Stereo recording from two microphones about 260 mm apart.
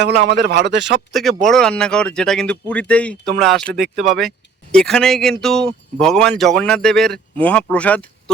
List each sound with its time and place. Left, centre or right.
0.0 s a man's voice: right
1.1 s speech: centre